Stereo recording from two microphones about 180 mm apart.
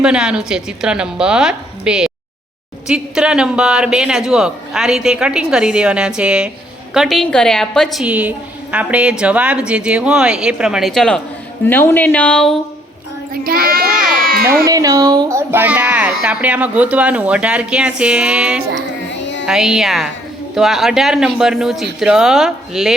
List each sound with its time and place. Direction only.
0.0 s speech: 5° right (ahead or behind)
13.3 s child singing: 55° right (ahead or behind)
14.2 s a sound: 55° right (ahead or behind)
14.6 s speech: 20° right (ahead or behind)
18.7 s music: 80° left
19.5 s speech: 5° right (ahead or behind)